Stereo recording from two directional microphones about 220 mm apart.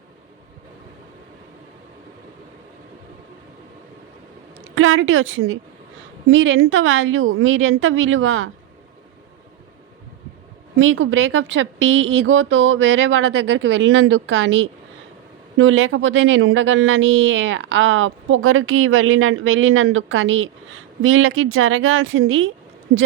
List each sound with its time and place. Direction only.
4.6 s a woman's voice: 65° right (ahead or behind)
10.8 s speech: 60° right (ahead or behind)